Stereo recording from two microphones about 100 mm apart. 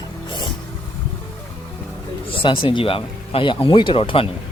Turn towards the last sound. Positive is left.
turn(degrees=65)  # may be behind; listen again after turning